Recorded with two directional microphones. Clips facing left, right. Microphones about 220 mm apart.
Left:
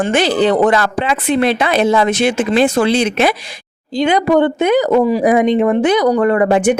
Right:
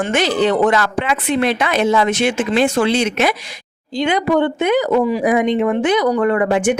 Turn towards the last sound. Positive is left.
turn(degrees=40)  # may be behind; listen again after turning